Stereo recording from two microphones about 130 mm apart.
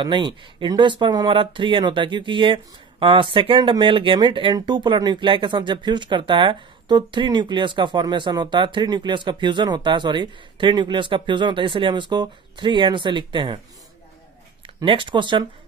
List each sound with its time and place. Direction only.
0.0 s speech: 35° right (ahead or behind)
14.8 s speech: 40° right (ahead or behind)